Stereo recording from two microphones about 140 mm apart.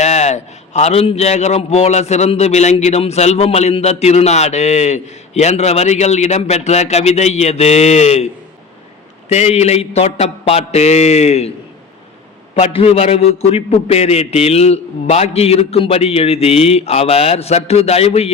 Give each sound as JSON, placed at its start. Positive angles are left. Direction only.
{"t": 0.0, "sound": "a man's voice", "side_deg": 55}
{"t": 9.3, "sound": "a man's voice", "side_deg": 50}
{"t": 12.5, "sound": "a man's voice", "side_deg": 45}